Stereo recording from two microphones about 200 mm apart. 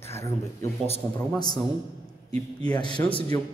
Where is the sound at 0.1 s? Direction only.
15° left (ahead or behind).